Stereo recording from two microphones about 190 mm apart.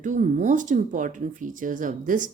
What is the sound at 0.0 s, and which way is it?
A woman's voice, 45° right (ahead or behind).